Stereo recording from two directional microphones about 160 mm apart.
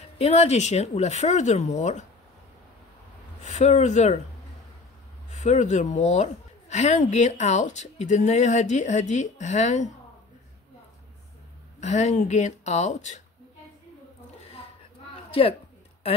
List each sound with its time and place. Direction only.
0.2 s a woman's voice: 40° left (ahead or behind)
3.4 s a woman's voice: 45° left (ahead or behind)
5.3 s a woman's voice: 45° left (ahead or behind)
11.8 s a woman's voice: 45° left (ahead or behind)